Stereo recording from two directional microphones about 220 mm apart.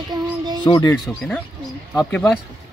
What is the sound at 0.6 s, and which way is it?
Speech, 15° left (ahead or behind).